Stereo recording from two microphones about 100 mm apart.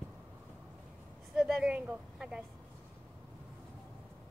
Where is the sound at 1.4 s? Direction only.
Centre (ahead or behind).